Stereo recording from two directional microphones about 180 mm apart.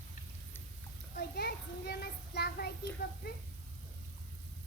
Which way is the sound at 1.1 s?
60° left (ahead or behind).